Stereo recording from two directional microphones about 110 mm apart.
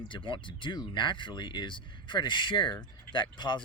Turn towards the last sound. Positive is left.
turn(degrees=45)  # may be behind; listen again after turning